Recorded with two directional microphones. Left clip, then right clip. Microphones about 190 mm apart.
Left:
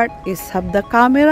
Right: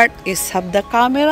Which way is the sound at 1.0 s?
40° left (ahead or behind).